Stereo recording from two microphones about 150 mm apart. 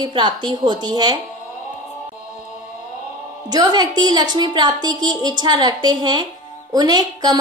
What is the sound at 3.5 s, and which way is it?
A woman's voice, 30° right (ahead or behind).